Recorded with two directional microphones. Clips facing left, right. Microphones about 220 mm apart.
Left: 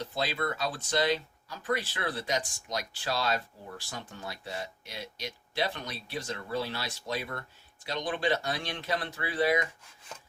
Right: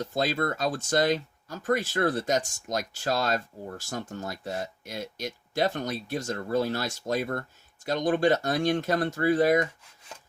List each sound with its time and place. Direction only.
0.0 s speech: 45° right (ahead or behind)